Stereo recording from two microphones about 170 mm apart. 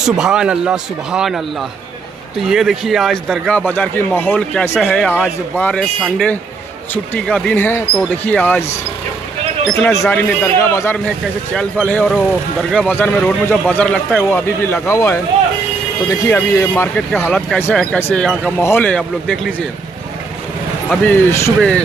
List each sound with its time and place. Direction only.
0.1 s a man's voice: 5° right (ahead or behind)
2.5 s a man's voice: centre (ahead or behind)
9.7 s a man's voice: 10° left (ahead or behind)
14.6 s a man's voice: 15° left (ahead or behind)
20.9 s a man's voice: 10° left (ahead or behind)